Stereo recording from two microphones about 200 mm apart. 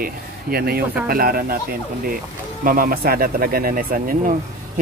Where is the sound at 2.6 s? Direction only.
45° right (ahead or behind).